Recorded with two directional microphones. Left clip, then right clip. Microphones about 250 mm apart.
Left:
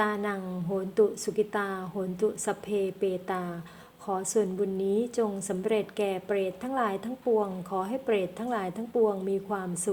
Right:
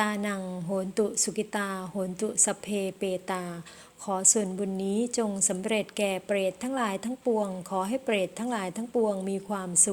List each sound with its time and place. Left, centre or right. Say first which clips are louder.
0.0 s a woman's voice: left 1 dB; right